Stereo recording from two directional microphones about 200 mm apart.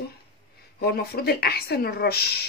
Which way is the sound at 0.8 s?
50° left (ahead or behind).